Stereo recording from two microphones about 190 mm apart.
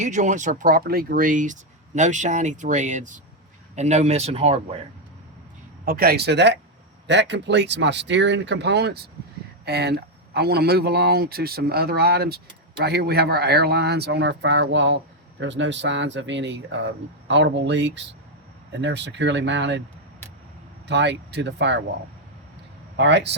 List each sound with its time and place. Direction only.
0.0 s speech: 40° right (ahead or behind)
5.8 s speech: 50° right (ahead or behind); by 19.8 s 70° right (ahead or behind)
20.8 s speech: 65° right (ahead or behind)
23.0 s speech: 70° right (ahead or behind)